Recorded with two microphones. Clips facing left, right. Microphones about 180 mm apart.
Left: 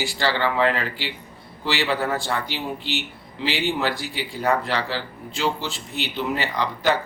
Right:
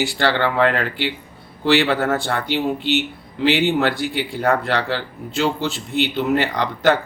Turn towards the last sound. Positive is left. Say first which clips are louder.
# right 4 dB
turn(degrees=-65)  # may be behind; listen again after turning